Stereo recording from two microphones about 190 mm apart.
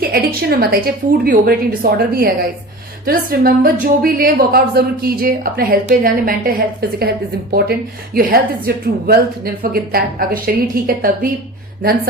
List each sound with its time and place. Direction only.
0.0 s a woman's voice: 55° right (ahead or behind)
7.5 s a woman's voice: 55° right (ahead or behind)